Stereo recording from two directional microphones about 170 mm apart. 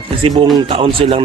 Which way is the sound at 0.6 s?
35° right (ahead or behind).